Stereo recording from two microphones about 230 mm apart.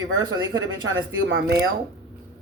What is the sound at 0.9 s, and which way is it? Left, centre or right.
Speech, right.